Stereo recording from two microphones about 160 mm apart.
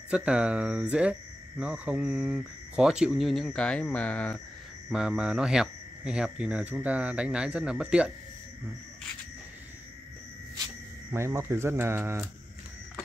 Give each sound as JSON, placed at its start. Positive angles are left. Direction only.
{"t": 0.1, "sound": "speech", "side_deg": -5}
{"t": 4.8, "sound": "speech", "side_deg": -5}
{"t": 11.1, "sound": "speech", "side_deg": -15}